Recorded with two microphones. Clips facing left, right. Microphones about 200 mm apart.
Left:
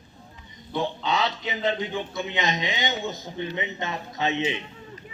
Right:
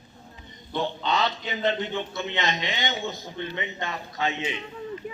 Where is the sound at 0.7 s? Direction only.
10° left (ahead or behind).